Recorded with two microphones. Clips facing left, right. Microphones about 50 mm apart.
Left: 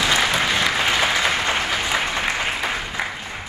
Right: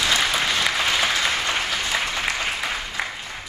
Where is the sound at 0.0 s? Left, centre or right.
Centre.